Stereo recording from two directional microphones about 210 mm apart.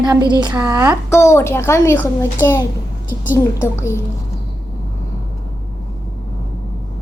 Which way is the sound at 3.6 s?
10° left (ahead or behind).